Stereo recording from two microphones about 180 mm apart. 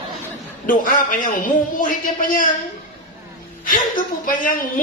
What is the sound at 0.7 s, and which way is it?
A man's voice, 50° left (ahead or behind).